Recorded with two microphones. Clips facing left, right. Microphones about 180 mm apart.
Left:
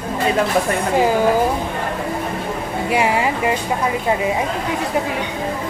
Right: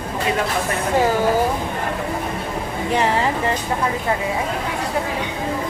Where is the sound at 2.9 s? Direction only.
10° left (ahead or behind).